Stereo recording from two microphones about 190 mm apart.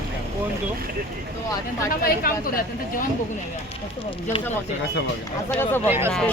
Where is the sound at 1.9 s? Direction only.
50° left (ahead or behind).